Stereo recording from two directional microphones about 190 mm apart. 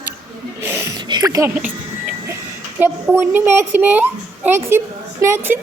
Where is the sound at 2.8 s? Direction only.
10° right (ahead or behind).